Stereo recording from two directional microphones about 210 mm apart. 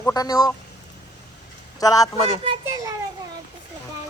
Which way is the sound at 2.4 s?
20° right (ahead or behind).